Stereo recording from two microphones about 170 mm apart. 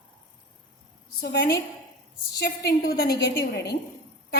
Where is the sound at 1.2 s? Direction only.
75° left (ahead or behind).